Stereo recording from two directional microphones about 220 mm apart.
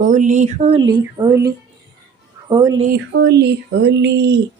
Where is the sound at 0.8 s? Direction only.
20° right (ahead or behind).